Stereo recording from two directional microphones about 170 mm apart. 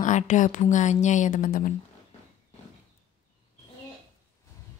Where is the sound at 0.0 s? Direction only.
45° left (ahead or behind).